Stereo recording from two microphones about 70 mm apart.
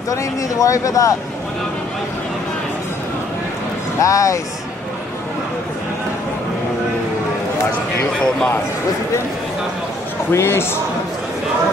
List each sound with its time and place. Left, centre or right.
0.1 s speech: left
4.0 s speech: left
10.3 s speech: left